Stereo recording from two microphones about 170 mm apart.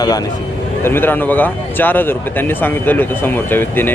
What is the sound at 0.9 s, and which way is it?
Speech, 10° left (ahead or behind).